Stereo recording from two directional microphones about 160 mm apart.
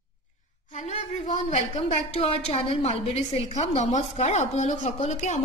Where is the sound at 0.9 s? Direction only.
45° left (ahead or behind).